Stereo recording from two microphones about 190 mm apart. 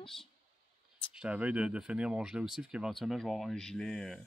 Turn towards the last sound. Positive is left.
turn(degrees=0)  # may be behind; listen again after turning